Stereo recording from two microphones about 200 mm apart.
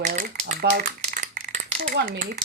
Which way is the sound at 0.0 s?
40° right (ahead or behind).